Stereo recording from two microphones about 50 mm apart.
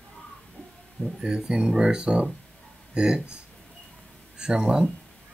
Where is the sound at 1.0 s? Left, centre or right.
Centre.